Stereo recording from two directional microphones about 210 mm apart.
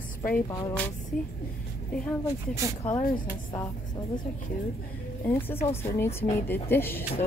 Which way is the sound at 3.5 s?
20° left (ahead or behind).